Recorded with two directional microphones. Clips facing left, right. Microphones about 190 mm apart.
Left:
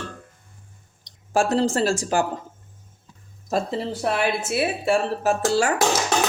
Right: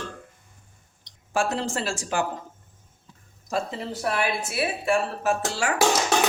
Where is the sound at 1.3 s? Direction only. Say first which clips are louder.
Left 6 dB; 40° left (ahead or behind).